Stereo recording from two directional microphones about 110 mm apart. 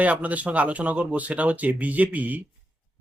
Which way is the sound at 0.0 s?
15° right (ahead or behind).